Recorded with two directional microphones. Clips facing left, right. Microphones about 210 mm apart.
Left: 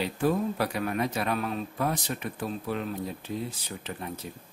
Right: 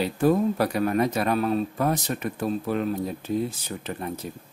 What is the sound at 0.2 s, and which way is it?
A man's voice, 40° right (ahead or behind).